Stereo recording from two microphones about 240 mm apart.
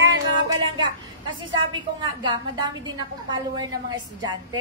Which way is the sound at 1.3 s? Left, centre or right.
Centre.